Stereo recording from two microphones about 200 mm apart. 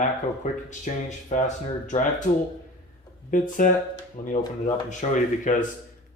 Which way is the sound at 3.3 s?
40° left (ahead or behind).